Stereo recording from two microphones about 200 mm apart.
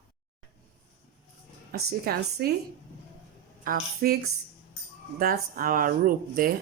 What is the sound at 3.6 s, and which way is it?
Speech, 45° right (ahead or behind).